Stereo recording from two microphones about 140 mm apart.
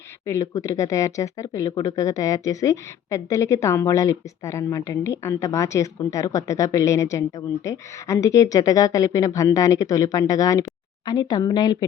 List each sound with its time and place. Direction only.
0.3 s speech: 20° left (ahead or behind)